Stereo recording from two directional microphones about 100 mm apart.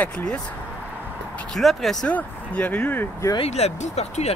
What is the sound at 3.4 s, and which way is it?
Speech, 90° left.